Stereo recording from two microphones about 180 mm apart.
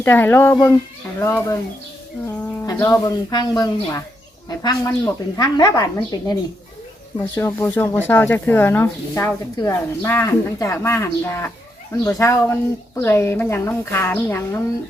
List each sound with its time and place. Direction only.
0.0 s speech: 10° left (ahead or behind)
2.2 s bird: 10° left (ahead or behind)
2.6 s a woman's voice: 15° left (ahead or behind)